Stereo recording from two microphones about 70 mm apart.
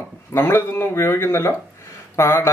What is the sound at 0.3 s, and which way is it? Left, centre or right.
Speech, left.